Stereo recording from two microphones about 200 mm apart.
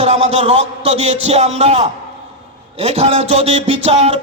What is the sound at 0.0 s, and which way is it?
A man's voice, 30° right (ahead or behind).